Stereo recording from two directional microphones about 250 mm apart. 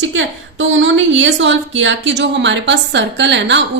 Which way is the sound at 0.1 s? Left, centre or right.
Right.